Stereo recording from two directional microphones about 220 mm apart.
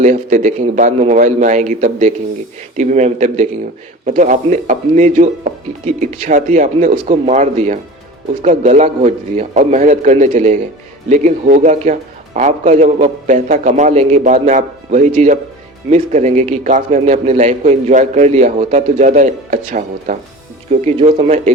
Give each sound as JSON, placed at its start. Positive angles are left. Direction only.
{"t": 0.0, "sound": "a man's voice", "side_deg": -35}